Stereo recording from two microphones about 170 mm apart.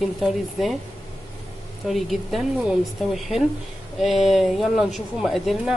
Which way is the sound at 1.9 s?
Centre (ahead or behind).